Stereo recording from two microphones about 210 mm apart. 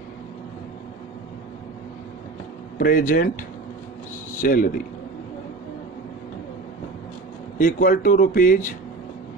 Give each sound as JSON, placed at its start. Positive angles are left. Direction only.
{"t": 2.8, "sound": "speech", "side_deg": 40}
{"t": 4.4, "sound": "a man's voice", "side_deg": 45}
{"t": 7.5, "sound": "speech", "side_deg": 40}